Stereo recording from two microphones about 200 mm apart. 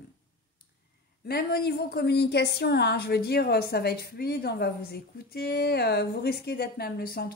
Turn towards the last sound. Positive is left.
turn(degrees=50)  # may be behind; listen again after turning